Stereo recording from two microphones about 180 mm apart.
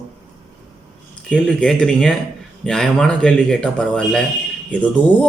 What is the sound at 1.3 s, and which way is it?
A man's voice, 5° left (ahead or behind).